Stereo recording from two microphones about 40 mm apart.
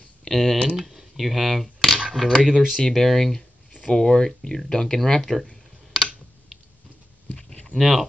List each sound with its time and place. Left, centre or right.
0.3 s speech: centre
0.7 s speech: centre
2.0 s camera: centre
2.4 s speech: centre
2.9 s speech: centre
7.7 s speech: centre